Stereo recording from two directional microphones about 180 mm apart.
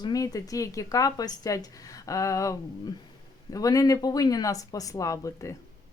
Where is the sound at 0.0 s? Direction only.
20° left (ahead or behind).